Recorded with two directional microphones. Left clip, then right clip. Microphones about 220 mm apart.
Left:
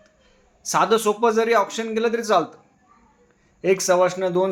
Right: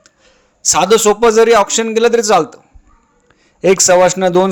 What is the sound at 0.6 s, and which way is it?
A man's voice, 45° right (ahead or behind).